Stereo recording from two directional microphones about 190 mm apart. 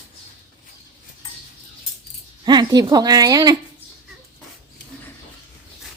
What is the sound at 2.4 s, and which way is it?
Speech, 20° right (ahead or behind).